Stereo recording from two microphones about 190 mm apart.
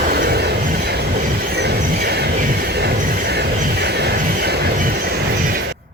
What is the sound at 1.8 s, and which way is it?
Vehicle, 50° right (ahead or behind).